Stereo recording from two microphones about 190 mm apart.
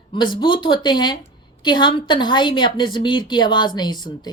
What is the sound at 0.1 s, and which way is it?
A woman's voice, 25° left (ahead or behind).